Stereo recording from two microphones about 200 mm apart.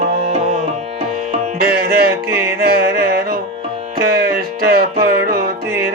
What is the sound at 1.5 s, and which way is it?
Music, 50° right (ahead or behind).